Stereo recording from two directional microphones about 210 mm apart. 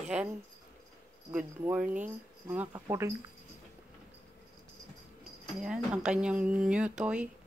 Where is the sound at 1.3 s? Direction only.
10° right (ahead or behind).